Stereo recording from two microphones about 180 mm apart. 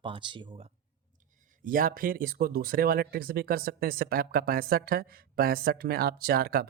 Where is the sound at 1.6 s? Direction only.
50° right (ahead or behind).